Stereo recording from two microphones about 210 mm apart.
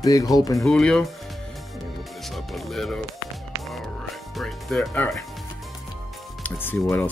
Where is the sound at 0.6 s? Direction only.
5° left (ahead or behind).